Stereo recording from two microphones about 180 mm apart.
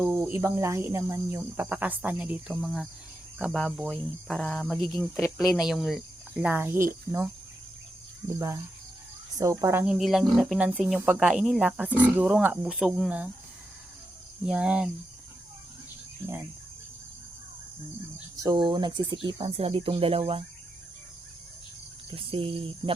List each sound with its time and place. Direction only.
0.0 s speech: 15° right (ahead or behind)
9.4 s speech: 15° right (ahead or behind)
9.8 s speech: centre (ahead or behind)
14.4 s speech: 5° right (ahead or behind)
18.4 s speech: 25° right (ahead or behind)
22.1 s speech: 30° right (ahead or behind)